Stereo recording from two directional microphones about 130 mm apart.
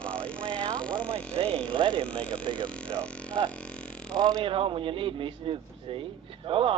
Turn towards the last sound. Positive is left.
turn(degrees=-45)  # may be behind; listen again after turning